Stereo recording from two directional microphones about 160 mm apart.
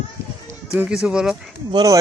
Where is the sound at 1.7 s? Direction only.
25° right (ahead or behind).